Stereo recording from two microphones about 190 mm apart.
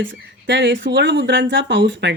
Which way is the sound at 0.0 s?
75° right (ahead or behind).